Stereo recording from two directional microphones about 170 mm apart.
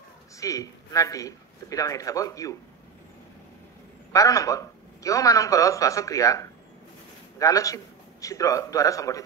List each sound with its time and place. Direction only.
0.4 s a man's voice: 20° left (ahead or behind)
4.1 s a man's voice: 20° left (ahead or behind)